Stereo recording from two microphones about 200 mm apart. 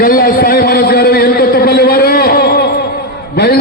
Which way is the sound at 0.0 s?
45° left (ahead or behind).